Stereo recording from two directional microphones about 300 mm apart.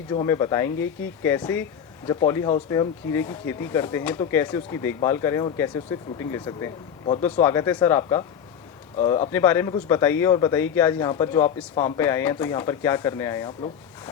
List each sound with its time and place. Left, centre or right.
0.1 s speech: centre